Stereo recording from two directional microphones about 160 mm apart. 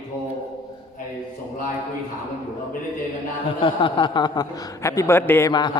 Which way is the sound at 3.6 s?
30° left (ahead or behind).